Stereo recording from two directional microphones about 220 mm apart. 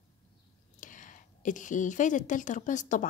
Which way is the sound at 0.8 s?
35° left (ahead or behind).